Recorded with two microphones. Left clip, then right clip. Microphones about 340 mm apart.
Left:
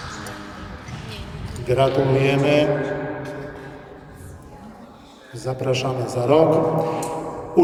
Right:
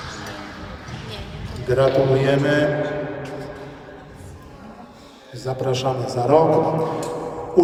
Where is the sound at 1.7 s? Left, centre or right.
Centre.